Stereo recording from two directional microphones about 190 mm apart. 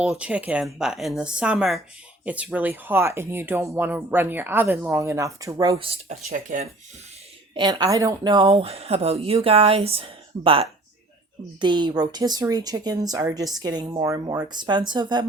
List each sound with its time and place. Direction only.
0.0 s speech: 5° right (ahead or behind)
5.7 s speech: 30° right (ahead or behind)
7.5 s a woman's voice: 25° right (ahead or behind)